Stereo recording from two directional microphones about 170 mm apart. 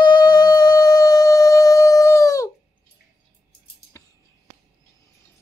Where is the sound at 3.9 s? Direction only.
15° left (ahead or behind).